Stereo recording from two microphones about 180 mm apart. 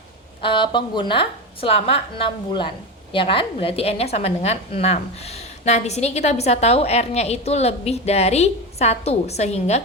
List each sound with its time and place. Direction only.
0.4 s a woman's voice: 25° left (ahead or behind)